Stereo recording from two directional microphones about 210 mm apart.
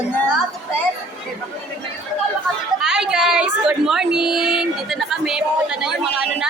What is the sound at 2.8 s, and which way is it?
A woman's voice, 5° right (ahead or behind).